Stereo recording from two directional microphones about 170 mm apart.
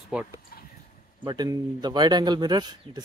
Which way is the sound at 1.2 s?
25° right (ahead or behind).